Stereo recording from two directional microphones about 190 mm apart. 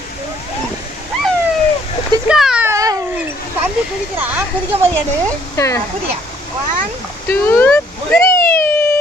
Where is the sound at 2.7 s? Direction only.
20° right (ahead or behind).